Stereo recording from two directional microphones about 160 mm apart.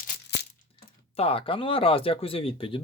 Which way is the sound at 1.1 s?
35° left (ahead or behind).